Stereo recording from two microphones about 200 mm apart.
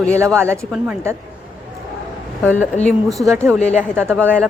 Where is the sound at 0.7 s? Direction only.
10° right (ahead or behind).